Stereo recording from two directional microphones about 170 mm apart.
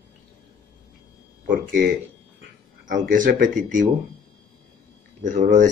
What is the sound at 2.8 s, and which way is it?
A man's voice, 50° right (ahead or behind).